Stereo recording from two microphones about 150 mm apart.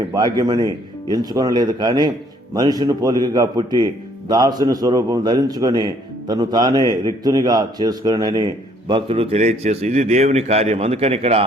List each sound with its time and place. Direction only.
0.1 s a man's voice: 25° right (ahead or behind); by 11.4 s 40° right (ahead or behind)